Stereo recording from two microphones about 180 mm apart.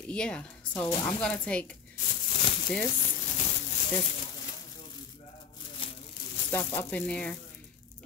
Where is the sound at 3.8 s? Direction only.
30° left (ahead or behind).